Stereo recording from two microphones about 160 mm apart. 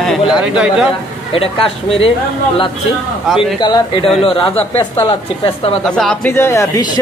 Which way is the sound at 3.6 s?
25° left (ahead or behind).